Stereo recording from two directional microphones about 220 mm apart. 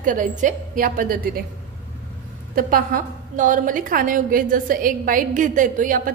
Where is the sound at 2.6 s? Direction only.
40° right (ahead or behind).